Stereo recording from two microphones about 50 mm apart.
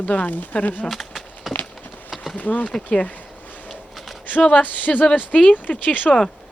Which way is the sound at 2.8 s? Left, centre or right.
Left.